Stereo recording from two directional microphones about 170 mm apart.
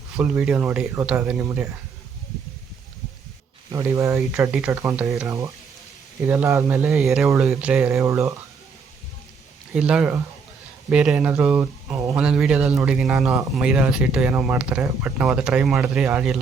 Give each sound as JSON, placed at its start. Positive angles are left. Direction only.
{"t": 0.2, "sound": "speech", "side_deg": -5}
{"t": 3.7, "sound": "speech", "side_deg": -20}
{"t": 8.0, "sound": "speech", "side_deg": -15}
{"t": 9.7, "sound": "speech", "side_deg": -5}